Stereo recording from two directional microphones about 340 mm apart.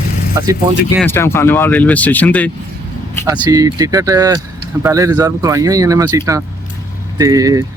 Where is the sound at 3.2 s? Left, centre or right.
Centre.